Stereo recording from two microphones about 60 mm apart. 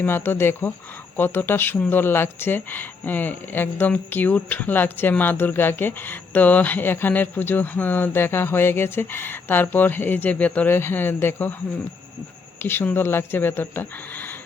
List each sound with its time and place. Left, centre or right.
0.0 s speech: left
10.7 s speech: left
12.6 s speech: left